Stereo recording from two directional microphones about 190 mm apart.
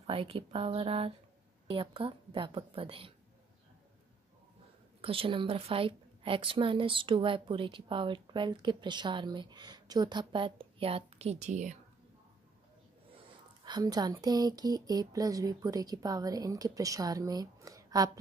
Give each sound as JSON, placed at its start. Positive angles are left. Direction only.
{"t": 0.0, "sound": "a woman's voice", "side_deg": -30}
{"t": 5.0, "sound": "a woman's voice", "side_deg": -30}
{"t": 13.7, "sound": "a woman's voice", "side_deg": -20}